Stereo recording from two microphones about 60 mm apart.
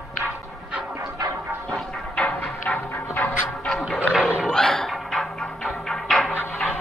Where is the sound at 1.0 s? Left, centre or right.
Right.